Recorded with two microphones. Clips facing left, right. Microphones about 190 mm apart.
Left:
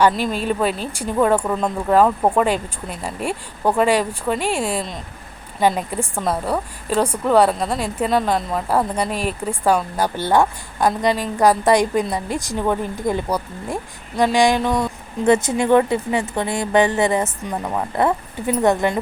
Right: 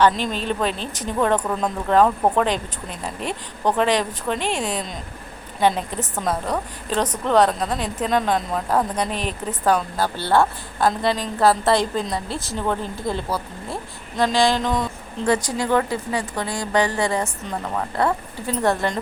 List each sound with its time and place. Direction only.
0.0 s a woman's voice: 5° left (ahead or behind)
15.3 s a woman's voice: 25° left (ahead or behind)